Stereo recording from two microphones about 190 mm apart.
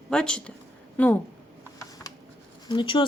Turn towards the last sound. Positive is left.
turn(degrees=25)  # may be behind; listen again after turning